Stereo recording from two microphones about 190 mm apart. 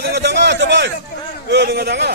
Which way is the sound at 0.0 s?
65° right (ahead or behind).